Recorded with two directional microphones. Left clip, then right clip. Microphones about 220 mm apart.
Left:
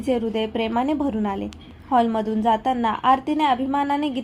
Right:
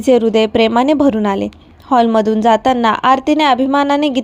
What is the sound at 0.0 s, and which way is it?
A woman's voice, 40° right (ahead or behind).